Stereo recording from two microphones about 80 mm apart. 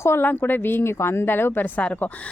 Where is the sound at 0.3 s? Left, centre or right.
Left.